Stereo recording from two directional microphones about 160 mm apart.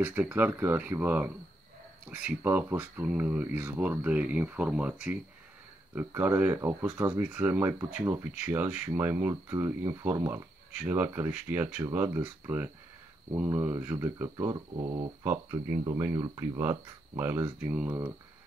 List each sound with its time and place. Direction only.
0.0 s speech: 10° right (ahead or behind); by 15.0 s 25° right (ahead or behind)
15.2 s speech: 15° right (ahead or behind)